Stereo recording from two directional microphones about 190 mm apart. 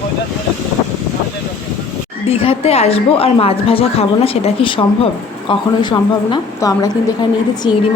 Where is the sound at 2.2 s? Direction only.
30° left (ahead or behind).